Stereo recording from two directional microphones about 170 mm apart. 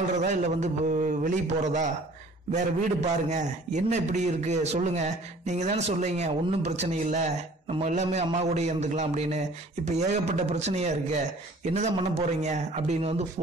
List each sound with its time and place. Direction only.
0.2 s a man's voice: 45° right (ahead or behind)